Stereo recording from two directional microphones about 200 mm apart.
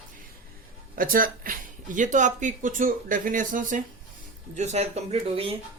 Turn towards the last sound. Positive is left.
turn(degrees=-30)  # may be behind; listen again after turning